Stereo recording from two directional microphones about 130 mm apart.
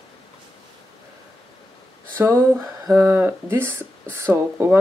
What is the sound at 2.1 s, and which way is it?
Speech, 20° right (ahead or behind).